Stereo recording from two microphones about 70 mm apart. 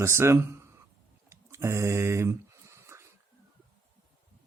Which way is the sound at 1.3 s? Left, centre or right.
Right.